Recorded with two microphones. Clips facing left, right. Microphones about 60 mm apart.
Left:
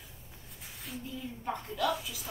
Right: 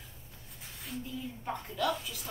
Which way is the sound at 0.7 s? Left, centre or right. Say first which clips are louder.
Even; centre.